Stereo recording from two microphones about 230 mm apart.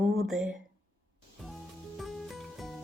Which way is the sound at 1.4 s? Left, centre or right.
Centre.